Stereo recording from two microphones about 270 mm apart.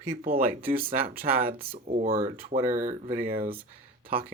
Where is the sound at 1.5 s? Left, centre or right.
Centre.